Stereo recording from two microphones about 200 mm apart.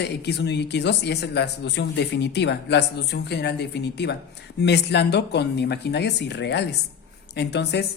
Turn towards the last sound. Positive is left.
turn(degrees=60)  # may be behind; listen again after turning